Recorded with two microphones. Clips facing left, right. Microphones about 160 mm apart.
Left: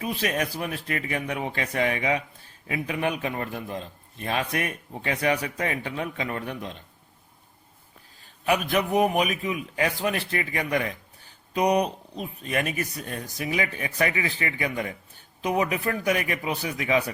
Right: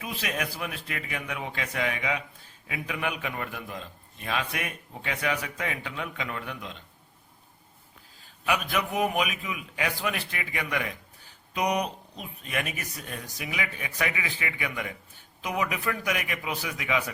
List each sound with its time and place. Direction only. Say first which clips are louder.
0.0 s a man's voice: left 5 dB; 40° left (ahead or behind)
8.4 s a man's voice: left 5 dB; 40° left (ahead or behind)